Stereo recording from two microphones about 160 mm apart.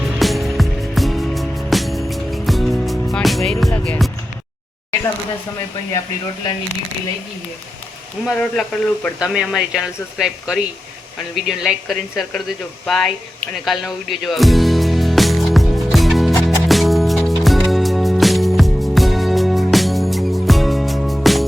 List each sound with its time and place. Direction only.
0.2 s music: centre (ahead or behind)
8.3 s speech: 5° left (ahead or behind)
12.8 s music: centre (ahead or behind)